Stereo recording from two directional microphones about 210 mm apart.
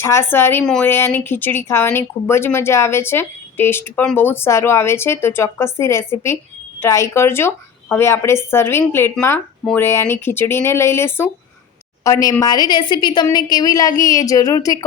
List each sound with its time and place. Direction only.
0.0 s a woman's voice: 10° left (ahead or behind)